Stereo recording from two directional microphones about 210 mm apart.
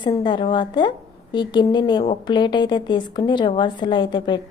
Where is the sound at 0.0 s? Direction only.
20° left (ahead or behind).